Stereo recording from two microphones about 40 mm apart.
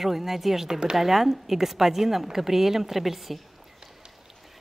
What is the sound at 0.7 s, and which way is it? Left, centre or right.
Speech, centre.